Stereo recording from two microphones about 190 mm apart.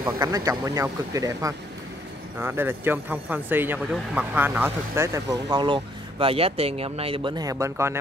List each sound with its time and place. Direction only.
0.0 s speech: 20° right (ahead or behind)